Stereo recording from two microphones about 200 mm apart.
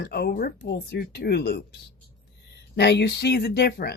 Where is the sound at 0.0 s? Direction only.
55° left (ahead or behind).